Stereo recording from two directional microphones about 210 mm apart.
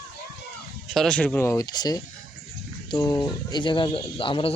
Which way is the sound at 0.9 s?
5° left (ahead or behind).